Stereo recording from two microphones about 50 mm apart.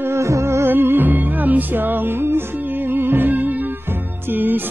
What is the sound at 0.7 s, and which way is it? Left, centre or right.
Music, right.